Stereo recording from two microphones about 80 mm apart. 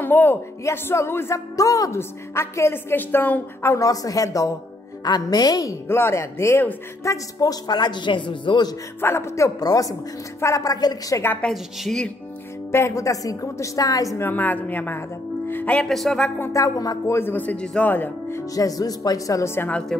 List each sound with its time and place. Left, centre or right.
0.0 s speech: left
1.6 s a woman's voice: left
3.7 s speech: left
5.0 s a woman's voice: left
5.9 s speech: left
9.0 s speech: left
11.5 s a woman's voice: centre
12.7 s speech: left
14.2 s a woman's voice: left
15.8 s a woman's voice: centre
16.5 s speech: left
17.1 s a woman's voice: left
18.4 s speech: left
19.9 s speech: centre